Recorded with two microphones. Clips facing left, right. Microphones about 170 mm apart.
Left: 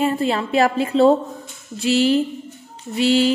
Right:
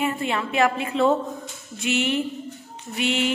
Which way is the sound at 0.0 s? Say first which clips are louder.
Left 5 dB; 35° left (ahead or behind).